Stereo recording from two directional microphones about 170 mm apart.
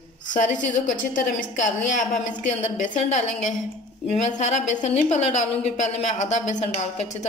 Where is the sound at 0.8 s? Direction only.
50° left (ahead or behind).